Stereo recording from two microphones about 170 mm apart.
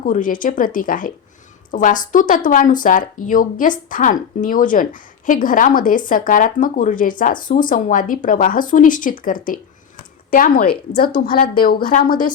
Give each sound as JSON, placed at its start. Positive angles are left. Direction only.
{"t": 0.0, "sound": "a woman's voice", "side_deg": 50}
{"t": 12.0, "sound": "a woman's voice", "side_deg": 25}